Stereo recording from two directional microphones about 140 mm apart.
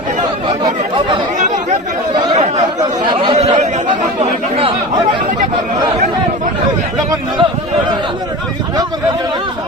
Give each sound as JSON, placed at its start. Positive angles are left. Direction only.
{"t": 1.4, "sound": "chatter", "side_deg": -60}
{"t": 3.1, "sound": "chatter", "side_deg": -35}
{"t": 3.3, "sound": "chatter", "side_deg": -50}